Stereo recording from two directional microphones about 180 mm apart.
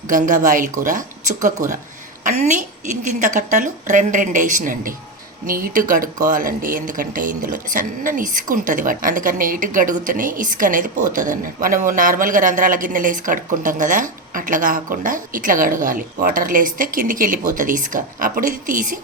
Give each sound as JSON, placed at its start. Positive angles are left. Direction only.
{"t": 0.1, "sound": "a woman's voice", "side_deg": -45}